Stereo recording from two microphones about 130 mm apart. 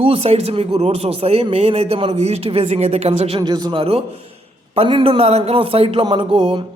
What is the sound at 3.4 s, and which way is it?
Speech, 30° right (ahead or behind).